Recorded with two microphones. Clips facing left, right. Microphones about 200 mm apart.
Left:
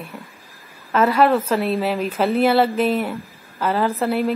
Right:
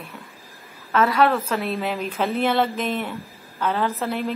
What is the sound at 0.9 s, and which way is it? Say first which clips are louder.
A woman's voice: left 3 dB; 5° left (ahead or behind).